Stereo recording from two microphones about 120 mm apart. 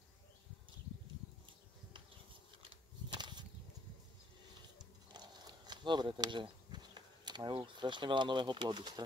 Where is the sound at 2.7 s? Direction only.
40° right (ahead or behind).